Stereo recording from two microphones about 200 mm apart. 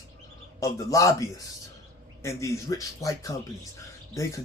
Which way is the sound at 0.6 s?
15° left (ahead or behind).